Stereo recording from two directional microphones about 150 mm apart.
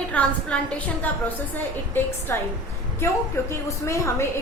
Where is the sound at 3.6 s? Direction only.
20° left (ahead or behind).